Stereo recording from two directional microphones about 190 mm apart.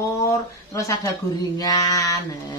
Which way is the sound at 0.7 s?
15° left (ahead or behind).